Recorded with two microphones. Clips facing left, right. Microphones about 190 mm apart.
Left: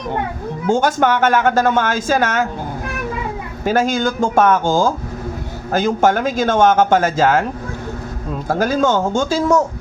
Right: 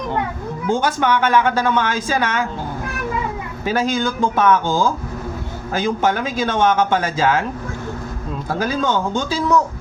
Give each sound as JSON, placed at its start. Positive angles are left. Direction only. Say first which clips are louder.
{"t": 0.7, "sound": "speech", "louder": "left 3 dB", "side_deg": 45}
{"t": 3.6, "sound": "speech", "louder": "left 3 dB", "side_deg": 45}
{"t": 8.4, "sound": "speech", "louder": "left 5 dB", "side_deg": 45}